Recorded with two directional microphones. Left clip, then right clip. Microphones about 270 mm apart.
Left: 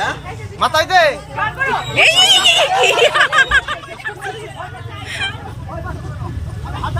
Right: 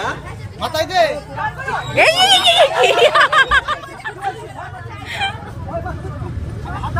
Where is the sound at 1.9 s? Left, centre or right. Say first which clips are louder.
Left 1 dB; centre.